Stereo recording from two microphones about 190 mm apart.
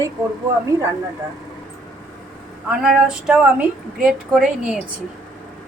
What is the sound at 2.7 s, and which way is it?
Speech, 5° right (ahead or behind).